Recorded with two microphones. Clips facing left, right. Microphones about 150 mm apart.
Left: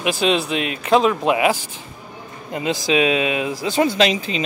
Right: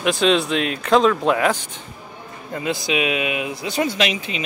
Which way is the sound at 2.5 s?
20° left (ahead or behind).